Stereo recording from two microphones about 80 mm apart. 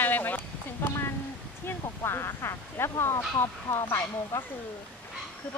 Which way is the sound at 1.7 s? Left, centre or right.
Left.